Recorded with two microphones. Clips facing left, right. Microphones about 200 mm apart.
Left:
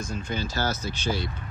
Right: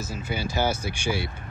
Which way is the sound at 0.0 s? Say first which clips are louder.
Even; 10° right (ahead or behind).